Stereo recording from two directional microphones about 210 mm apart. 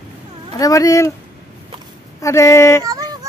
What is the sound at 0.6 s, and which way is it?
Speech, 15° left (ahead or behind).